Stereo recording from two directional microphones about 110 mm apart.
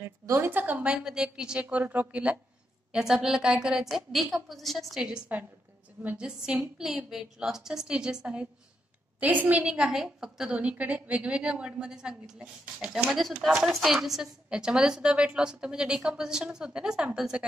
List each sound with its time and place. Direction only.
0.0 s a woman's voice: 20° right (ahead or behind); by 17.5 s 5° right (ahead or behind)